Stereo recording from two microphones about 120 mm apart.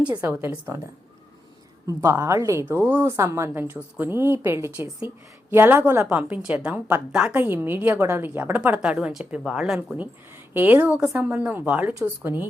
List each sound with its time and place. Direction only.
0.2 s a woman's voice: 15° right (ahead or behind)
1.9 s a woman's voice: 20° right (ahead or behind); by 9.7 s 5° right (ahead or behind)
10.5 s a woman's voice: 15° right (ahead or behind)